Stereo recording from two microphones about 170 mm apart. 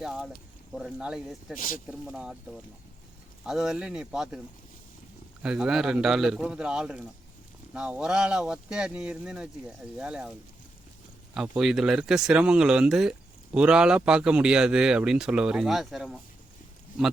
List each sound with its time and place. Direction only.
0.0 s speech: 5° right (ahead or behind)
1.5 s speech: 50° left (ahead or behind)
1.9 s speech: 5° right (ahead or behind)
5.4 s speech: 5° right (ahead or behind)
11.3 s speech: 5° right (ahead or behind)